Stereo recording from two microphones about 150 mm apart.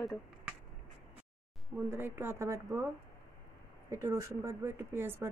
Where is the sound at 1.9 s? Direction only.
15° right (ahead or behind).